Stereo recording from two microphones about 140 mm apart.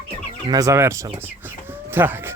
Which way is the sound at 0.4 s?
25° right (ahead or behind).